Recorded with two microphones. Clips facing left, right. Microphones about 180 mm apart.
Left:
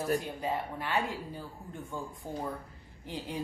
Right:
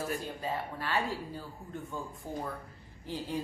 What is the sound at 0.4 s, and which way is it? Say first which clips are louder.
Speech: left 2 dB; 20° left (ahead or behind).